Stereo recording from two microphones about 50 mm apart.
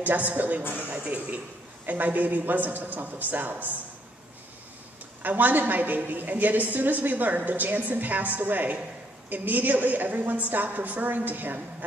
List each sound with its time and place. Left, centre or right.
0.0 s a woman's voice: right
5.2 s a woman's voice: right